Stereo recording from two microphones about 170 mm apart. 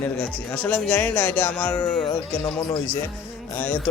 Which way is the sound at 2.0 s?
30° left (ahead or behind).